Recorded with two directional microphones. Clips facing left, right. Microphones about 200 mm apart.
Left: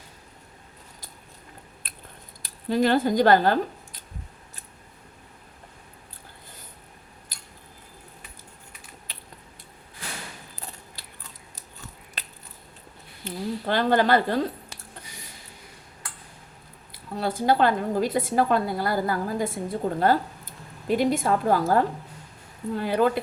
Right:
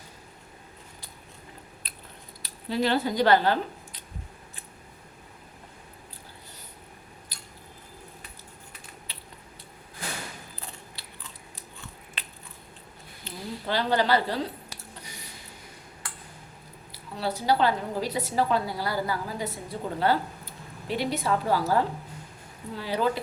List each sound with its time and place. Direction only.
1.8 s scissors: 50° left (ahead or behind)
2.4 s speech: 50° left (ahead or behind)
10.9 s biting: 45° left (ahead or behind)
13.2 s speech: 50° left (ahead or behind)
16.9 s a woman's voice: 50° left (ahead or behind)